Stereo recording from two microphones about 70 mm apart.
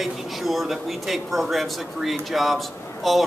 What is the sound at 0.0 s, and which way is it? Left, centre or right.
Speech, centre.